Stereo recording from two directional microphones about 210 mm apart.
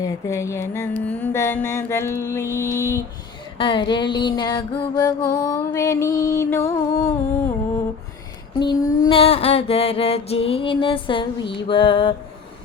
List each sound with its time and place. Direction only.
0.0 s music: 15° left (ahead or behind)
3.6 s mantra: 20° left (ahead or behind)
5.4 s music: 15° left (ahead or behind)
8.5 s mantra: 20° left (ahead or behind)